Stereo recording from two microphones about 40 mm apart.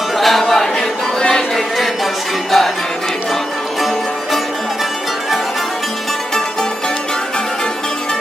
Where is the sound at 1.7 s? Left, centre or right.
Centre.